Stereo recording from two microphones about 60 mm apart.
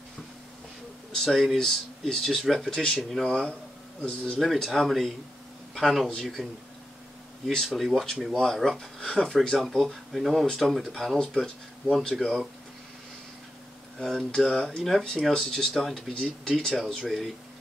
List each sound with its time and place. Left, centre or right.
1.1 s speech: centre
3.3 s speech: centre
4.6 s speech: centre
7.4 s speech: centre
13.9 s speech: centre